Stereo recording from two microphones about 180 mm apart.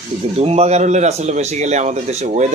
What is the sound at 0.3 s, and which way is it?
Speech, 35° right (ahead or behind).